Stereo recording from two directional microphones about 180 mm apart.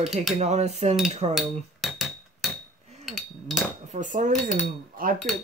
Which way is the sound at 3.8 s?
45° right (ahead or behind).